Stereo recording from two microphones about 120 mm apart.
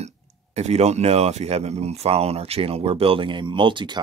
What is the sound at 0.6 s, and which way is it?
Speech, 65° right (ahead or behind).